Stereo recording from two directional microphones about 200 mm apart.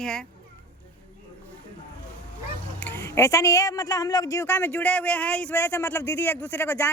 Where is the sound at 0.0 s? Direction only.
5° left (ahead or behind).